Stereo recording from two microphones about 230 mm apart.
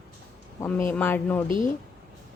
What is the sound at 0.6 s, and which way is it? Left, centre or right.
Speech, centre.